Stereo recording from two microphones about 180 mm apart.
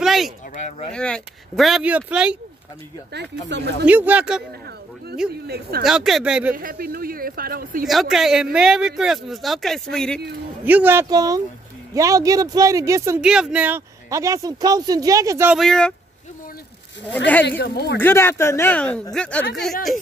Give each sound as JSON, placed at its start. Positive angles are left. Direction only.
{"t": 0.0, "sound": "a sound", "side_deg": 0}
{"t": 0.9, "sound": "speech", "side_deg": 5}
{"t": 3.1, "sound": "speech", "side_deg": -70}
{"t": 3.8, "sound": "speech", "side_deg": -10}
{"t": 5.5, "sound": "speech", "side_deg": -60}
{"t": 5.9, "sound": "speech", "side_deg": 0}
{"t": 6.5, "sound": "speech", "side_deg": -50}
{"t": 7.8, "sound": "speech", "side_deg": 0}
{"t": 10.6, "sound": "speech", "side_deg": -10}
{"t": 13.2, "sound": "speech", "side_deg": -5}
{"t": 15.5, "sound": "speech", "side_deg": 5}
{"t": 17.5, "sound": "speech", "side_deg": 60}
{"t": 18.0, "sound": "speech", "side_deg": 15}